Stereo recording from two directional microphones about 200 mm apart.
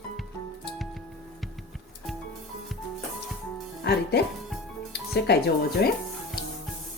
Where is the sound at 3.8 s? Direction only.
55° left (ahead or behind).